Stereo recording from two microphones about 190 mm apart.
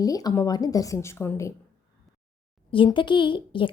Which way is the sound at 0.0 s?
20° left (ahead or behind).